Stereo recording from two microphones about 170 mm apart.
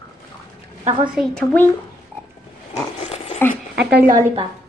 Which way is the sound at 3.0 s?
40° left (ahead or behind).